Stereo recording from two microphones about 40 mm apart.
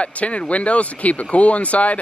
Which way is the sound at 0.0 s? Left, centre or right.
Left.